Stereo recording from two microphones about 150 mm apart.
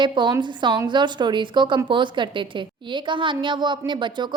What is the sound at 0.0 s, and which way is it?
Speech, 30° right (ahead or behind).